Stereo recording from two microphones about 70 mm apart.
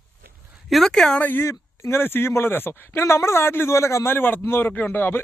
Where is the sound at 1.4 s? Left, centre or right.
Left.